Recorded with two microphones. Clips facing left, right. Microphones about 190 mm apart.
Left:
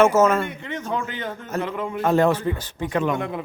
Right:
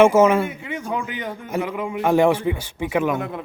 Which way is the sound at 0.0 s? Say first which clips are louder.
Right 3 dB; 10° right (ahead or behind).